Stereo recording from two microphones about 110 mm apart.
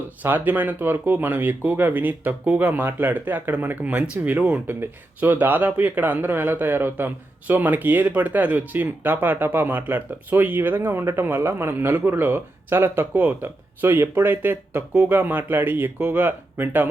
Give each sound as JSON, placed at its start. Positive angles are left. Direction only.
{"t": 0.2, "sound": "speech", "side_deg": -15}